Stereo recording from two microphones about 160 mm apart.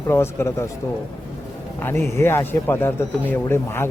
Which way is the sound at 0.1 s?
15° left (ahead or behind).